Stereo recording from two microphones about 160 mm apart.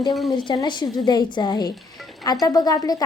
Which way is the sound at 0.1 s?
Centre (ahead or behind).